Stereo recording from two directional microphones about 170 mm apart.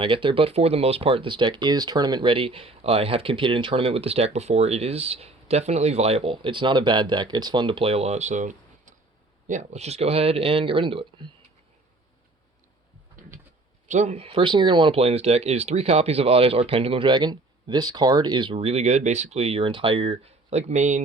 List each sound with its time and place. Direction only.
0.0 s speech: 30° right (ahead or behind)
13.2 s bird: 50° right (ahead or behind)
13.8 s speech: 45° right (ahead or behind)